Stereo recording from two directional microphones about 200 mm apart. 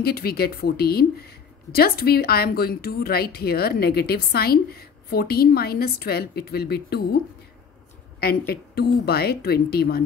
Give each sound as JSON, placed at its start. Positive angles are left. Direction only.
{"t": 0.0, "sound": "a woman's voice", "side_deg": 50}
{"t": 8.2, "sound": "a woman's voice", "side_deg": 50}